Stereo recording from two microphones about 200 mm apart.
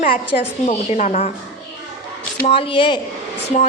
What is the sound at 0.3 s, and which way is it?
A woman's voice, 30° left (ahead or behind).